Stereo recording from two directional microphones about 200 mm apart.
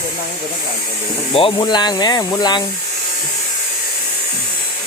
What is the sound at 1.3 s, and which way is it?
Speech, 25° left (ahead or behind).